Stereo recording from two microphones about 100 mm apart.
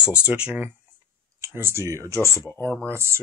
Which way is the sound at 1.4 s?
25° right (ahead or behind).